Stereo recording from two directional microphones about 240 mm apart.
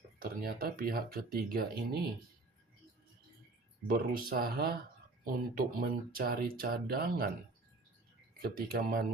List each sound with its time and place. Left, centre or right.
0.2 s speech: right
3.8 s speech: right
8.4 s speech: right